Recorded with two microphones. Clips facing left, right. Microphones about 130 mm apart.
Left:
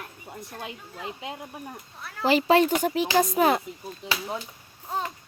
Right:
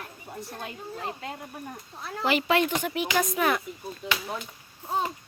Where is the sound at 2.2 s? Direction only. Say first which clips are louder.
Left 4 dB; 35° left (ahead or behind).